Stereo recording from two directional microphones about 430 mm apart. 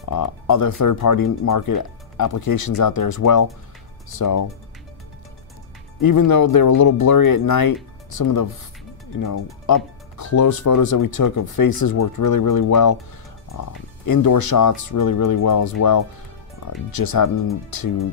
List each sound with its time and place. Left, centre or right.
0.1 s speech: left
5.9 s speech: left
14.0 s speech: left